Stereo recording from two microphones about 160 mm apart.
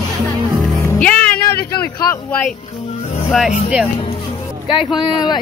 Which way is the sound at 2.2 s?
10° left (ahead or behind).